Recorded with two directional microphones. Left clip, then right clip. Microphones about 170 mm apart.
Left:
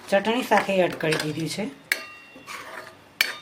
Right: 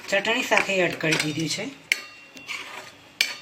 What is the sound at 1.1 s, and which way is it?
Speech, centre (ahead or behind).